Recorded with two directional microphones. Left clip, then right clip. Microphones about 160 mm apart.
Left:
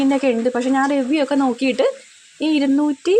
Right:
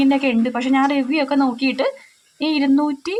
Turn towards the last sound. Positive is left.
turn(degrees=35)  # may be behind; listen again after turning